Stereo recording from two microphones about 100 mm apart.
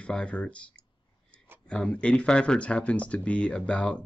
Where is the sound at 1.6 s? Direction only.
10° left (ahead or behind).